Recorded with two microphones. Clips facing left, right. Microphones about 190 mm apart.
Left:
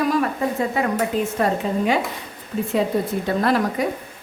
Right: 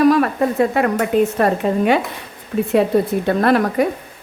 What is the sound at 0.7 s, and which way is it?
Speech, 60° right (ahead or behind).